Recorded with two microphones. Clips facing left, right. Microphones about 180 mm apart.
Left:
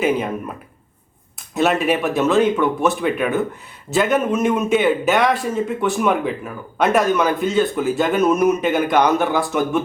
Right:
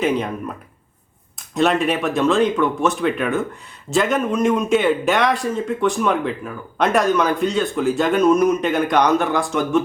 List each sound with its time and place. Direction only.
0.0 s a man's voice: 5° left (ahead or behind)
1.5 s a man's voice: 5° left (ahead or behind)